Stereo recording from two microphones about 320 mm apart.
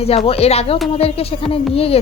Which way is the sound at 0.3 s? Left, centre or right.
Centre.